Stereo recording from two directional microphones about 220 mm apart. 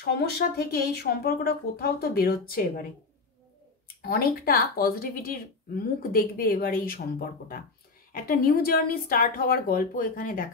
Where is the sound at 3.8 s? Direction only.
40° left (ahead or behind).